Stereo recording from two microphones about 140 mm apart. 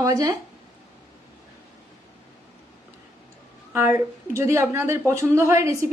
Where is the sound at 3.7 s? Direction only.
20° right (ahead or behind).